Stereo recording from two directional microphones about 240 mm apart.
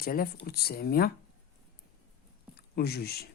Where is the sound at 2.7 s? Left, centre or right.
Left.